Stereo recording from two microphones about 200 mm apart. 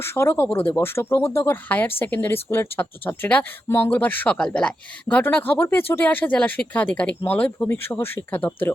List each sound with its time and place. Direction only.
0.0 s a woman's voice: 15° left (ahead or behind)